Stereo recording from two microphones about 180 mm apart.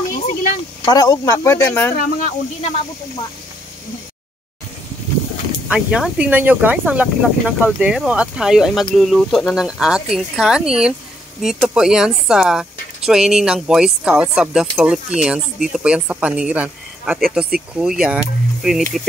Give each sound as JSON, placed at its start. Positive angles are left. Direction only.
{"t": 0.8, "sound": "speech", "side_deg": 20}
{"t": 2.0, "sound": "speech", "side_deg": 50}
{"t": 5.7, "sound": "speech", "side_deg": -5}